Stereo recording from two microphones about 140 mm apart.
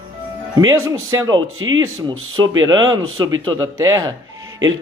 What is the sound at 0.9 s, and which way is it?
Speech, 25° right (ahead or behind).